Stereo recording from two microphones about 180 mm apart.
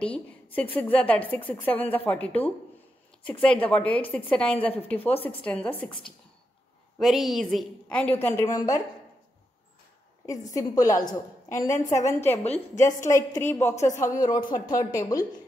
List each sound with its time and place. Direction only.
0.0 s a woman's voice: 5° left (ahead or behind)
7.0 s a woman's voice: centre (ahead or behind); by 8.8 s 20° left (ahead or behind)
10.2 s a woman's voice: 20° left (ahead or behind)
13.7 s speech: 40° left (ahead or behind)
14.0 s a woman's voice: 20° left (ahead or behind)